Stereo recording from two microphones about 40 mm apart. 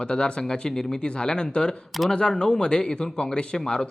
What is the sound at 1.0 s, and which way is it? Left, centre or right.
Speech, left.